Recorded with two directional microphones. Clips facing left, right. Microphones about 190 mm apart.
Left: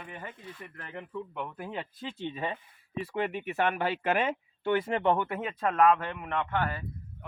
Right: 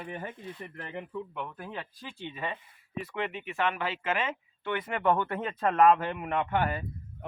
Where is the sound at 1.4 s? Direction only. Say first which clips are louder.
Left 2 dB; 10° left (ahead or behind); by 3.2 s 30° left (ahead or behind).